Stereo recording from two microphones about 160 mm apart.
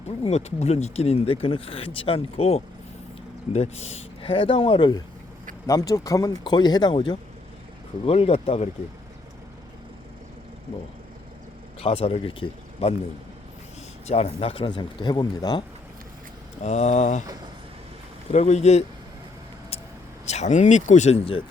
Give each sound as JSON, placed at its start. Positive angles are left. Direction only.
{"t": 0.2, "sound": "speech", "side_deg": 45}
{"t": 11.8, "sound": "speech", "side_deg": 35}
{"t": 14.1, "sound": "speech", "side_deg": 40}
{"t": 16.6, "sound": "speech", "side_deg": 45}
{"t": 18.3, "sound": "speech", "side_deg": 45}
{"t": 20.2, "sound": "speech", "side_deg": 45}